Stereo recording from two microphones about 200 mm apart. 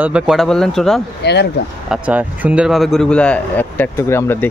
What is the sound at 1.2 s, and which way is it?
Speech, 55° left (ahead or behind).